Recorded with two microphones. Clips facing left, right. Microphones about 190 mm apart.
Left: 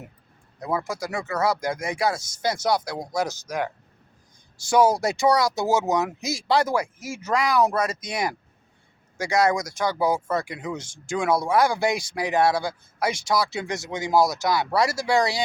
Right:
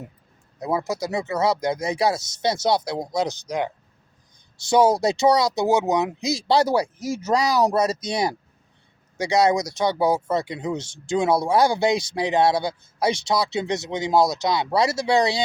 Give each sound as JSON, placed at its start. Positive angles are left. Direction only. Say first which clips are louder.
{"t": 0.6, "sound": "speech", "louder": "right 3 dB", "side_deg": -20}
{"t": 4.7, "sound": "speech", "louder": "right 2 dB", "side_deg": -20}
{"t": 9.1, "sound": "speech", "louder": "right 2 dB", "side_deg": -20}